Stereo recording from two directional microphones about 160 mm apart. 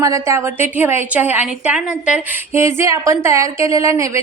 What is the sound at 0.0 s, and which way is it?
A woman's voice, 20° right (ahead or behind).